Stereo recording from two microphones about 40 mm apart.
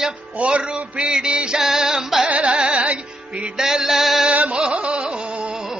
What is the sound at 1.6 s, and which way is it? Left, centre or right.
Music, centre.